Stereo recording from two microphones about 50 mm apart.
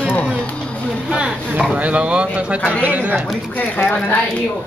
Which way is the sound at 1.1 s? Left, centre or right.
Centre.